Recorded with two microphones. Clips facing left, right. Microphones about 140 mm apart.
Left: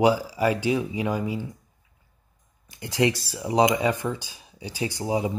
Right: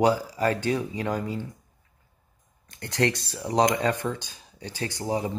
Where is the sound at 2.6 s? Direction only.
10° left (ahead or behind).